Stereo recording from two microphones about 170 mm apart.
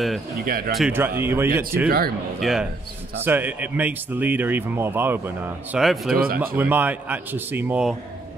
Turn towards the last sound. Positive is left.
turn(degrees=-10)  # may be behind; listen again after turning